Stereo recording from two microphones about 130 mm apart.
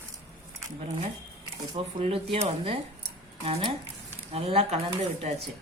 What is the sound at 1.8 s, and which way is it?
Speech, 45° right (ahead or behind).